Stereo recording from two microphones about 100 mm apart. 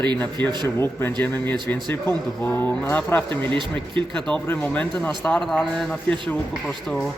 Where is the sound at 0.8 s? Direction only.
25° left (ahead or behind); by 7.1 s 5° left (ahead or behind).